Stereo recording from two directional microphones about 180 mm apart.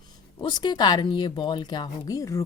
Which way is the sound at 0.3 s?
25° left (ahead or behind).